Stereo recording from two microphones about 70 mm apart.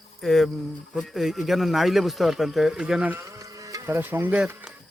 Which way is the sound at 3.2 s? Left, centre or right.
Right.